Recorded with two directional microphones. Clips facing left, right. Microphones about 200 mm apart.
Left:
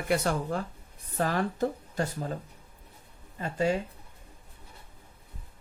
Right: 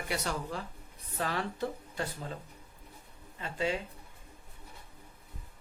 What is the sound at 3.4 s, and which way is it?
Speech, 45° left (ahead or behind).